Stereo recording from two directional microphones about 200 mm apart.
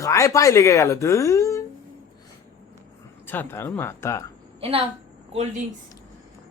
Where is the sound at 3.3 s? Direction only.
10° left (ahead or behind).